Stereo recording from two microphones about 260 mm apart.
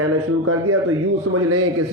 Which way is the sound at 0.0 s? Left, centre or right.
Right.